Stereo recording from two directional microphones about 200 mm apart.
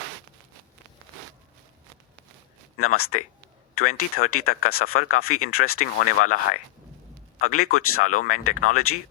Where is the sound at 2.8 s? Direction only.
90° left.